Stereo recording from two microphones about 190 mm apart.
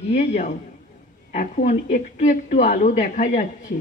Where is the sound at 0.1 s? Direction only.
40° left (ahead or behind).